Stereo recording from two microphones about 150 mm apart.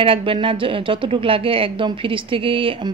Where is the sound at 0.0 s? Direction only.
35° right (ahead or behind).